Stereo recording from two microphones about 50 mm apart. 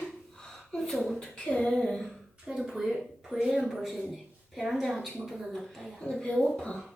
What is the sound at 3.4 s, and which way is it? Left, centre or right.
A woman's voice, centre.